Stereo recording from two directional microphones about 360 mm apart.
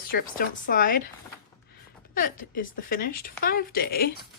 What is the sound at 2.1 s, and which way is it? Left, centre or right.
Speech, left.